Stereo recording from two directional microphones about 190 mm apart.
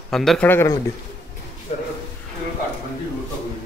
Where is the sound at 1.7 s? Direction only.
50° left (ahead or behind).